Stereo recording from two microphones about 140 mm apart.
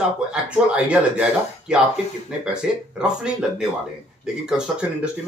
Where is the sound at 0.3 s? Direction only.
10° right (ahead or behind).